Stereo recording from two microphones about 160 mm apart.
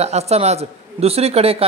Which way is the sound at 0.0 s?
40° right (ahead or behind).